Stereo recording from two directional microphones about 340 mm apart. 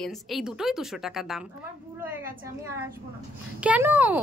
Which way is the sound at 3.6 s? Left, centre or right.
Centre.